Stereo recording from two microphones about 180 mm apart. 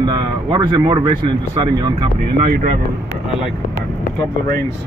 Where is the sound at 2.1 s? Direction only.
60° right (ahead or behind).